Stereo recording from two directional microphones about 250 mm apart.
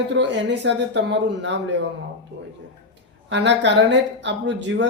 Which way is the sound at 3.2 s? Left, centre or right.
Right.